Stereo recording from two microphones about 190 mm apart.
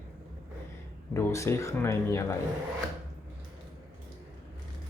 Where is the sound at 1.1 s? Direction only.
15° left (ahead or behind).